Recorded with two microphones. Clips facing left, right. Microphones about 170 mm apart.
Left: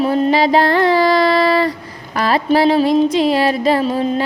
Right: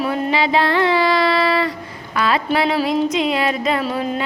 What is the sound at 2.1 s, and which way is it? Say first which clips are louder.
Music: left 4 dB; 40° left (ahead or behind).